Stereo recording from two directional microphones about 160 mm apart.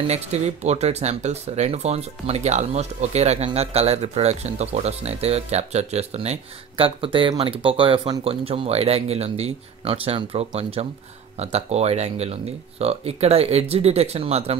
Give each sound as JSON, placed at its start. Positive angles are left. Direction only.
{"t": 0.1, "sound": "speech", "side_deg": -45}